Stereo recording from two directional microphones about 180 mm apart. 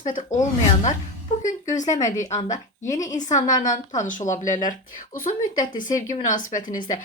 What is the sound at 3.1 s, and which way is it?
Speech, 40° left (ahead or behind).